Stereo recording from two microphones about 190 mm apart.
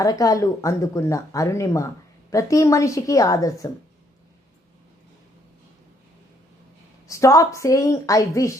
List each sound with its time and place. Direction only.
0.0 s speech: 20° left (ahead or behind)
7.1 s speech: 15° left (ahead or behind)